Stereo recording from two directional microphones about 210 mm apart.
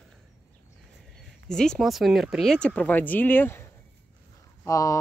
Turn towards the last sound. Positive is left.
turn(degrees=15)  # may be behind; listen again after turning